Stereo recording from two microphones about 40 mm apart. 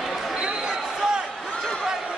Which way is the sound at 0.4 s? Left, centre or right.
Right.